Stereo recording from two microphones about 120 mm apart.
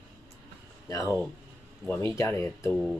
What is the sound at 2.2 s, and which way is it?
Speech, 25° left (ahead or behind).